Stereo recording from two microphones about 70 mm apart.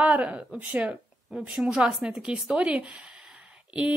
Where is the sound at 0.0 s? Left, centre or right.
Centre.